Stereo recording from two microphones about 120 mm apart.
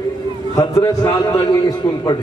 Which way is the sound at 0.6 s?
30° left (ahead or behind).